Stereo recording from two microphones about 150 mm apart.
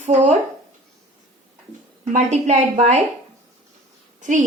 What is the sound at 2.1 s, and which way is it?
Speech, 50° right (ahead or behind).